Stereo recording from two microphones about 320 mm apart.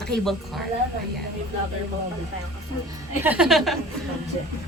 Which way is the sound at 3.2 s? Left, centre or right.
Centre.